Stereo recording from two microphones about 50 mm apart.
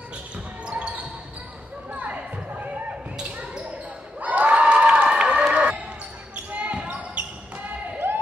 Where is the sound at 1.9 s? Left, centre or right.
Right.